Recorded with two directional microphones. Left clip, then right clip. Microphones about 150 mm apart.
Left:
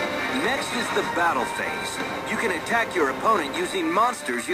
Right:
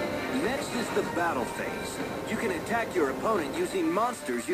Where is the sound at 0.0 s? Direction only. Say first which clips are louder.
Left 5 dB; 10° right (ahead or behind).